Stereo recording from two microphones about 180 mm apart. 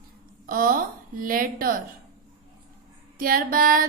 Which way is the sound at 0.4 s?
50° right (ahead or behind).